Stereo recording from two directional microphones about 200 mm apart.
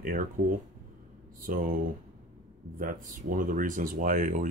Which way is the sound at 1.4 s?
45° right (ahead or behind).